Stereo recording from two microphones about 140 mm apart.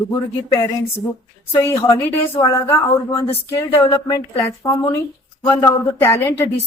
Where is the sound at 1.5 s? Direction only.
20° left (ahead or behind).